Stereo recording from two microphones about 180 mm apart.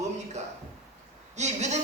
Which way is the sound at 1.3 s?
40° right (ahead or behind).